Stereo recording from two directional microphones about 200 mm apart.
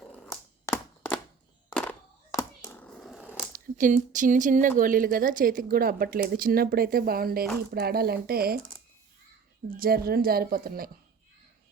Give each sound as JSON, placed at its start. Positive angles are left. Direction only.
{"t": 0.0, "sound": "cat", "side_deg": 0}
{"t": 0.6, "sound": "a sound", "side_deg": 10}
{"t": 3.5, "sound": "speech", "side_deg": -40}
{"t": 9.6, "sound": "speech", "side_deg": -45}